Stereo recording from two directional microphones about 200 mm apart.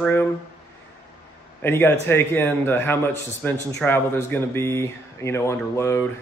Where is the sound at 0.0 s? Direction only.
10° left (ahead or behind).